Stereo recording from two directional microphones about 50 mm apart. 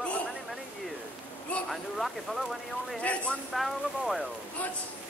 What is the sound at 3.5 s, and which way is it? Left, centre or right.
Speech, centre.